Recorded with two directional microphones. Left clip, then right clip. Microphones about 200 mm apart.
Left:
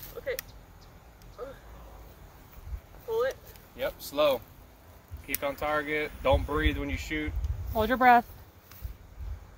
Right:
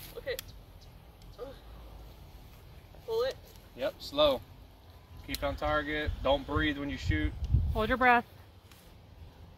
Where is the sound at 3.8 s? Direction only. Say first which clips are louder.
Left 1 dB; 35° left (ahead or behind).